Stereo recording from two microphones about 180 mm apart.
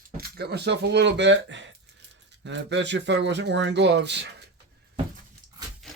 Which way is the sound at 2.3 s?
75° right (ahead or behind).